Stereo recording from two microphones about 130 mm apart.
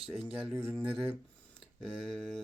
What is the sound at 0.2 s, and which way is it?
Speech, 5° right (ahead or behind).